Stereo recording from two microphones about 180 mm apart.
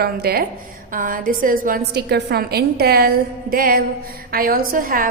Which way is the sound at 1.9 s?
65° right (ahead or behind).